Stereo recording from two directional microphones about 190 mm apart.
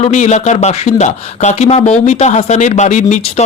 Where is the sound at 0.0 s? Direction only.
35° left (ahead or behind).